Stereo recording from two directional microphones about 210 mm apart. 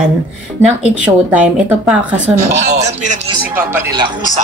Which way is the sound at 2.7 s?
35° right (ahead or behind).